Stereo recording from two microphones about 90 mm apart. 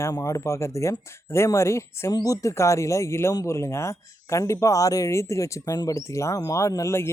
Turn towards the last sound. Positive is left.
turn(degrees=30)  # may be behind; listen again after turning